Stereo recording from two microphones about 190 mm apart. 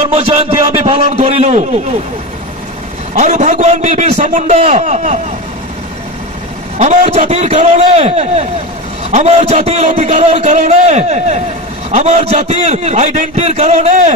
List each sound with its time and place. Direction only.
0.1 s a man's voice: 35° right (ahead or behind)
3.2 s a man's voice: 40° right (ahead or behind)
6.8 s a man's voice: 35° right (ahead or behind)